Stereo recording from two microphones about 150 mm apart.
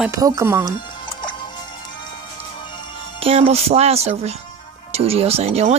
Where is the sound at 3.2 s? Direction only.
40° right (ahead or behind).